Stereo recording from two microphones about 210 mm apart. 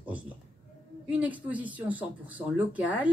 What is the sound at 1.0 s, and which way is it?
Speech, 5° right (ahead or behind).